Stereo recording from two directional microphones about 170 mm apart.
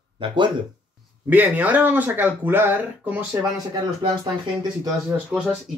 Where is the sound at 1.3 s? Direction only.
10° right (ahead or behind).